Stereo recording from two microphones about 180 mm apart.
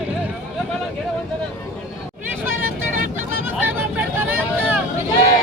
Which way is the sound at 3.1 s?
10° right (ahead or behind).